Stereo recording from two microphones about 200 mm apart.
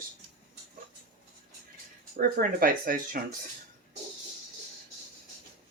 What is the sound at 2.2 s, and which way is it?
Speech, 45° right (ahead or behind).